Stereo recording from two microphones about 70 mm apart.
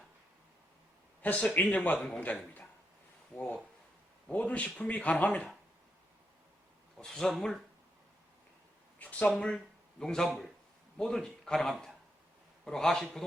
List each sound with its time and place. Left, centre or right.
1.2 s a man's voice: left
7.0 s a man's voice: centre
9.0 s a man's voice: left; by 13.2 s centre